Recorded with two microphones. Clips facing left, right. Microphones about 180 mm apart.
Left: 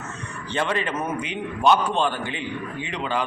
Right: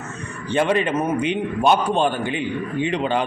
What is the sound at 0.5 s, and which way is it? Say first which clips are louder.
A man's voice: right 6 dB; 15° right (ahead or behind).